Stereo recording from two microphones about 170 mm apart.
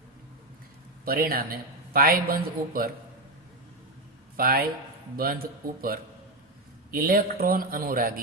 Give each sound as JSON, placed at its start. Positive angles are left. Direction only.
{"t": 1.0, "sound": "a man's voice", "side_deg": -60}
{"t": 4.4, "sound": "a man's voice", "side_deg": -60}
{"t": 6.9, "sound": "a man's voice", "side_deg": -60}